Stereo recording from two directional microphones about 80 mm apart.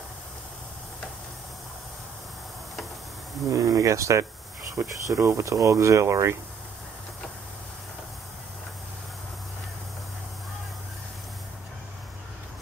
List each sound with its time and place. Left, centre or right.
3.4 s speech: right